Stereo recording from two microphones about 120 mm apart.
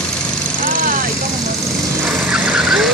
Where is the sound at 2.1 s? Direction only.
5° right (ahead or behind).